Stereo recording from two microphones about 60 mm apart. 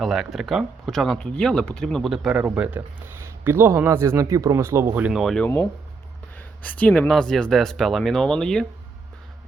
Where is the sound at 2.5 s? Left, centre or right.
Right.